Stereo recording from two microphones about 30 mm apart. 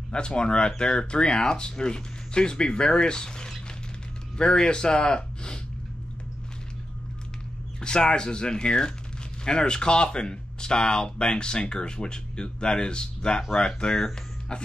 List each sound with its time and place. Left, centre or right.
0.1 s speech: left
7.8 s speech: left